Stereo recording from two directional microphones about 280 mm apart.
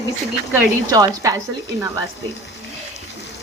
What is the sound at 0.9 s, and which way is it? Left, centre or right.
Speech, centre.